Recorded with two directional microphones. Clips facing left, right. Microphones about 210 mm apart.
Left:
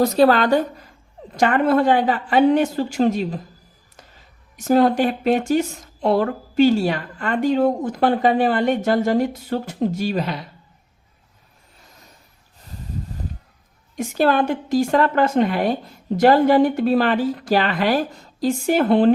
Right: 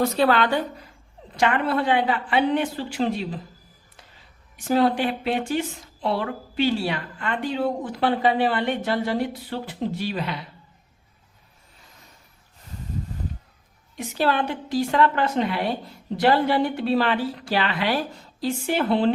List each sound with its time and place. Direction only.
0.0 s a woman's voice: 40° left (ahead or behind)
4.5 s a woman's voice: 45° left (ahead or behind)
13.9 s a woman's voice: 45° left (ahead or behind)